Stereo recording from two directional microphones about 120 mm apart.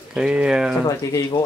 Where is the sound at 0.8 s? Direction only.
30° left (ahead or behind).